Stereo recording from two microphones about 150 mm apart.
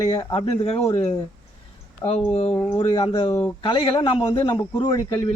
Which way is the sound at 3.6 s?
35° left (ahead or behind).